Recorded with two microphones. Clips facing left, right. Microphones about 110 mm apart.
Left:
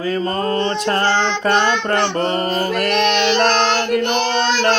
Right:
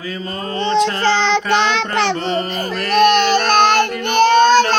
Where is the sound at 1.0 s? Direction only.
90° right.